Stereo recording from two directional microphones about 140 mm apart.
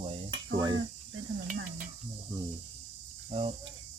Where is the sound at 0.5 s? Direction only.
30° right (ahead or behind).